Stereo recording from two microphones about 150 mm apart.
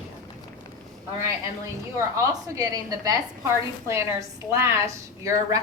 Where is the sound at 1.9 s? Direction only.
20° right (ahead or behind).